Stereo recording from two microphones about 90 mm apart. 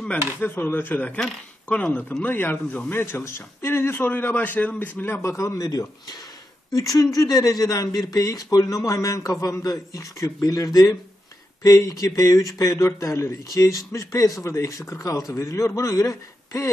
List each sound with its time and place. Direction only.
0.4 s a man's voice: 25° left (ahead or behind)